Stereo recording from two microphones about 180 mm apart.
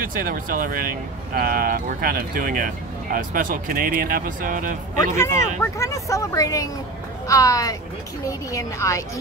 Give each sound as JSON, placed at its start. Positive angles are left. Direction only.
{"t": 0.0, "sound": "speech", "side_deg": -50}
{"t": 5.1, "sound": "speech", "side_deg": 15}